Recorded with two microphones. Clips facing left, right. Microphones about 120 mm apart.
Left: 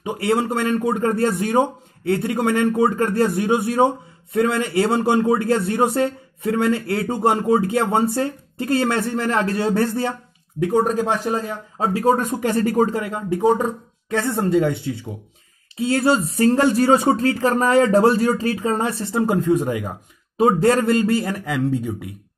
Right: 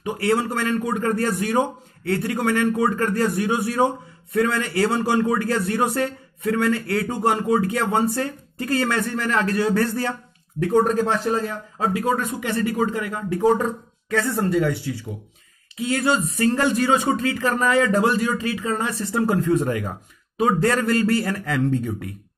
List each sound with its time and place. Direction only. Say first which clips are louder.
0.0 s speech: left 1 dB; 20° left (ahead or behind)
10.6 s speech: even; 10° left (ahead or behind)
11.9 s speech: left 6 dB; 40° left (ahead or behind); by 20.0 s 10° left (ahead or behind)
20.3 s speech: left 4 dB; 25° left (ahead or behind); by 22.1 s 10° left (ahead or behind)